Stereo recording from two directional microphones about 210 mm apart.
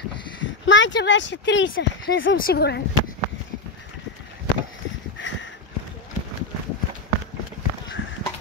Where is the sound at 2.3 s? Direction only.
45° left (ahead or behind).